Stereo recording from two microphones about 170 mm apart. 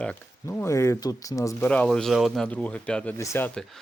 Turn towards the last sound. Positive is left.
turn(degrees=10)  # may be behind; listen again after turning